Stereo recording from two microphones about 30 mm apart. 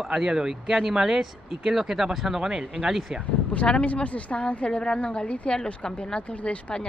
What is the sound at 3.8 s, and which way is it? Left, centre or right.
Speech, left.